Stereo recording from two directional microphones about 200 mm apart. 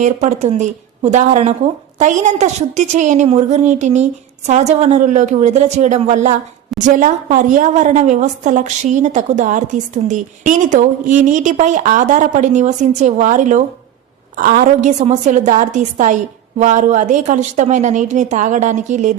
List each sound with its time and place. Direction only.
0.0 s a woman's voice: 35° right (ahead or behind)